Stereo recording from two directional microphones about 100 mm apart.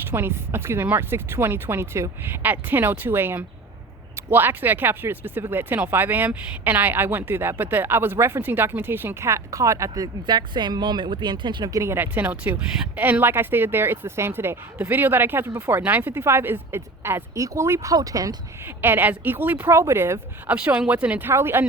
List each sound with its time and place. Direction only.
0.1 s speech: 25° right (ahead or behind); by 11.7 s 50° right (ahead or behind)
11.7 s speech: 30° right (ahead or behind)
18.6 s speech: 20° right (ahead or behind)
20.5 s speech: 15° right (ahead or behind)